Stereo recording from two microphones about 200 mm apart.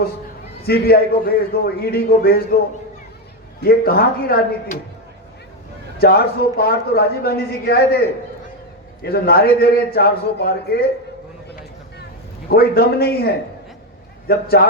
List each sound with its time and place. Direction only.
0.7 s a man's voice: 50° left (ahead or behind)
3.6 s a man's voice: 50° left (ahead or behind)
6.0 s a man's voice: 50° left (ahead or behind)
9.0 s a man's voice: 50° left (ahead or behind)
12.5 s a man's voice: 50° left (ahead or behind)